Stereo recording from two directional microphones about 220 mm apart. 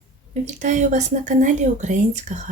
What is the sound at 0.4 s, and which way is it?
Speech, 35° right (ahead or behind).